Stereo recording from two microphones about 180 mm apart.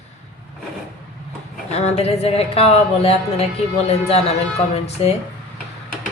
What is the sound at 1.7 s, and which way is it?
A woman's voice, 35° left (ahead or behind).